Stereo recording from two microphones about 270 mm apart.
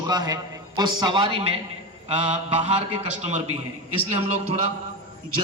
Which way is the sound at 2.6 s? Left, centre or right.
Right.